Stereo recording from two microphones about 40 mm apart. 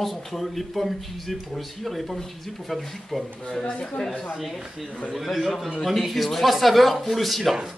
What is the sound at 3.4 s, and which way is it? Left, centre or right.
Speech, centre.